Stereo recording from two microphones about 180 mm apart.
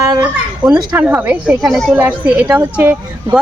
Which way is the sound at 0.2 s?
5° right (ahead or behind).